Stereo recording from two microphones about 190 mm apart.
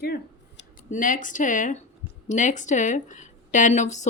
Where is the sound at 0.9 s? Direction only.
45° left (ahead or behind).